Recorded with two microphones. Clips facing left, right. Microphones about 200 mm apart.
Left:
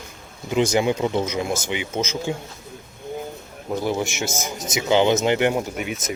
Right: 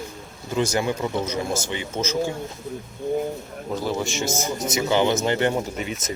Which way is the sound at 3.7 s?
15° left (ahead or behind).